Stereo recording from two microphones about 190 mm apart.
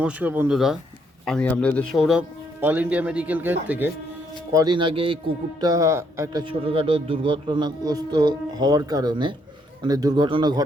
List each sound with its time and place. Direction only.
0.0 s speech: 10° right (ahead or behind)
2.0 s speech: 5° right (ahead or behind)
4.5 s a man's voice: 20° right (ahead or behind)
6.4 s a man's voice: 30° right (ahead or behind)